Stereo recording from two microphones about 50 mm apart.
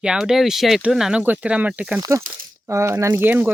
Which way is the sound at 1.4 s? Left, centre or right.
Right.